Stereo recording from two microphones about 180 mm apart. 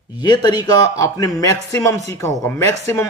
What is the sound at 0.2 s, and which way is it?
Speech, 25° left (ahead or behind).